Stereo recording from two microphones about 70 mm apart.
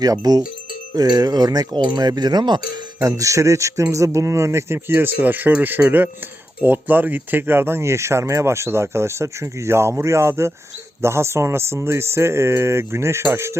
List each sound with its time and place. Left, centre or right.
0.0 s speech: right
3.0 s speech: right